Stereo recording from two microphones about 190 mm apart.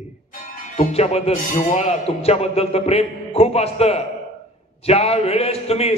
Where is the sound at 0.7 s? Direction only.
35° left (ahead or behind).